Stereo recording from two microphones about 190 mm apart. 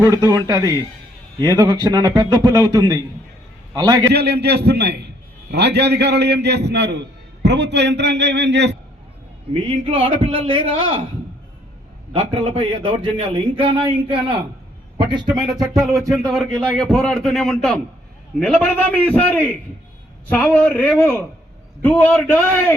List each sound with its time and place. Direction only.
0.0 s a man's voice: 15° right (ahead or behind)
4.1 s a man's voice: 60° right (ahead or behind)
9.6 s a man's voice: 30° right (ahead or behind)
12.1 s a man's voice: 30° right (ahead or behind)
15.7 s a man's voice: centre (ahead or behind)